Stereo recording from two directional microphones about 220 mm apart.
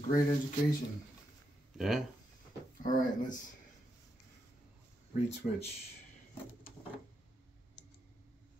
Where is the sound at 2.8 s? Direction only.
40° left (ahead or behind).